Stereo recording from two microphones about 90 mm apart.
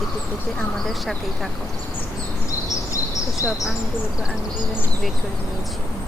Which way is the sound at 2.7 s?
40° left (ahead or behind).